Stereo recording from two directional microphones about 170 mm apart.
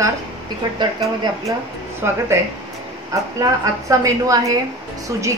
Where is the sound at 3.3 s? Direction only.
20° right (ahead or behind).